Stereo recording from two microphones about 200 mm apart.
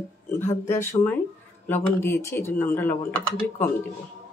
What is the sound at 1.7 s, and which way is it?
Speech, 15° left (ahead or behind).